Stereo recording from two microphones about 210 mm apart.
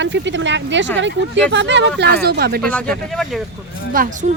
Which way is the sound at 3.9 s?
40° right (ahead or behind).